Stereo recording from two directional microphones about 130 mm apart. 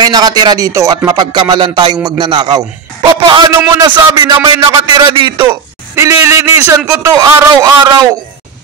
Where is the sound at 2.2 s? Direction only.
35° right (ahead or behind).